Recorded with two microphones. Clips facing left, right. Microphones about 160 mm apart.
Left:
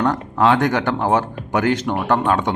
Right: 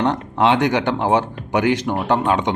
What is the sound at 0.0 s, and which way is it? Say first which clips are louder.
Speech: even; 20° right (ahead or behind).